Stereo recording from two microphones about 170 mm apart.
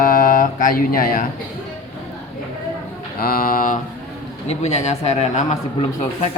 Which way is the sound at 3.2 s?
60° left (ahead or behind).